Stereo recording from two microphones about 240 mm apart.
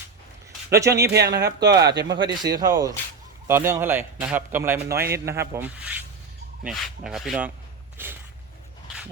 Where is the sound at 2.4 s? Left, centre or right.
Centre.